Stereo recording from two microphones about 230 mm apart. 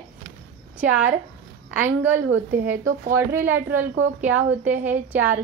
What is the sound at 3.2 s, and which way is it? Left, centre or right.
A woman's voice, centre.